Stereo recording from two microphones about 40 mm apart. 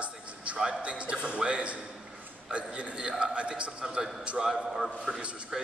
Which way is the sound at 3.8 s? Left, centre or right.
Centre.